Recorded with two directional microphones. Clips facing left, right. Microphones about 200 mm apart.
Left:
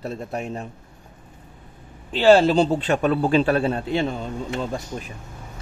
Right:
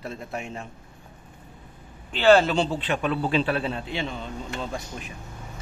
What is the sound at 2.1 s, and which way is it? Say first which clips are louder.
A man's voice: left 3 dB; 35° left (ahead or behind).